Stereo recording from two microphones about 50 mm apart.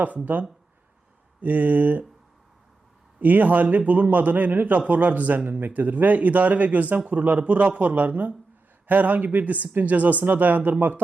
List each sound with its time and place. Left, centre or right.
0.0 s a man's voice: right
3.2 s a man's voice: right